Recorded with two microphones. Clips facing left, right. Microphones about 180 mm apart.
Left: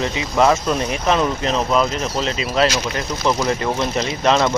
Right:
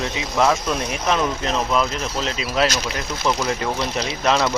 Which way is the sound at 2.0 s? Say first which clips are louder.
Left 3 dB; centre (ahead or behind).